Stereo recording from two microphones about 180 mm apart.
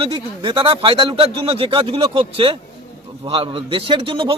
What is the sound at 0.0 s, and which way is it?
A man's voice, 30° right (ahead or behind).